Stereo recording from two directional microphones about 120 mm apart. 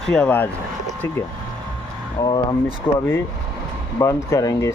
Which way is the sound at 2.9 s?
15° left (ahead or behind).